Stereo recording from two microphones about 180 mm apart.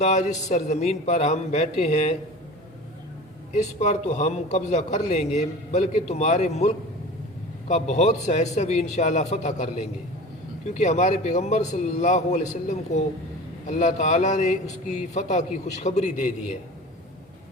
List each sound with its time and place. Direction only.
0.0 s a man's voice: 40° left (ahead or behind)
3.5 s a man's voice: 40° left (ahead or behind)
7.7 s a man's voice: 40° left (ahead or behind)
10.8 s a man's voice: 40° left (ahead or behind)